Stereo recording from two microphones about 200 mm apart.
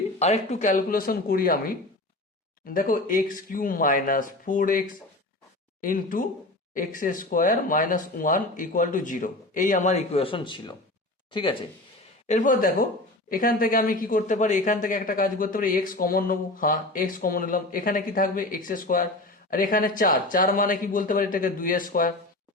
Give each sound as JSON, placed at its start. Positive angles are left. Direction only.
{"t": 0.2, "sound": "speech", "side_deg": 35}
{"t": 5.8, "sound": "speech", "side_deg": 45}
{"t": 12.3, "sound": "speech", "side_deg": 40}